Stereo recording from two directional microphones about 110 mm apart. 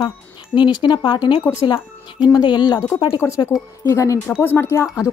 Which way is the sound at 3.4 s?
30° left (ahead or behind).